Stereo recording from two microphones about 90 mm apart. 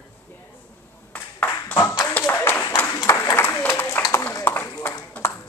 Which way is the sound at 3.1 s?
30° left (ahead or behind).